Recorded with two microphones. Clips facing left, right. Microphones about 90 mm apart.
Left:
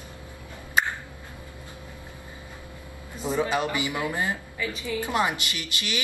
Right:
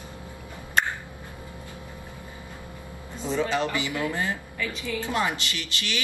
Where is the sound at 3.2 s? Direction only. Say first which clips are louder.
Even; 15° left (ahead or behind).